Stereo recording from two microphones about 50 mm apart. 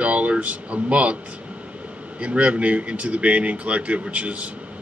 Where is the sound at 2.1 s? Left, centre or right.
Right.